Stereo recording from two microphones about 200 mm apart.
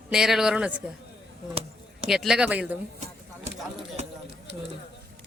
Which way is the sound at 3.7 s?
30° right (ahead or behind).